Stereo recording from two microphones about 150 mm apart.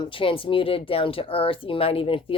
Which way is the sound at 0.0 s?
35° left (ahead or behind).